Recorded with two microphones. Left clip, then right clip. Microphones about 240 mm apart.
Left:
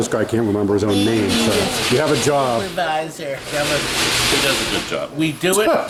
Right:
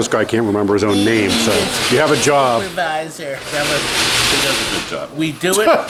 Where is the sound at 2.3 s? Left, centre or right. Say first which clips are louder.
Right 4 dB; centre.